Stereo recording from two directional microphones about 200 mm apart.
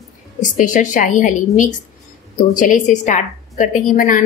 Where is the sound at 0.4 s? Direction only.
40° left (ahead or behind).